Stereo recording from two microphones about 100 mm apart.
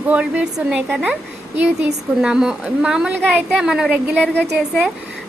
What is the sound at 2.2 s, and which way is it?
Speech, 5° right (ahead or behind).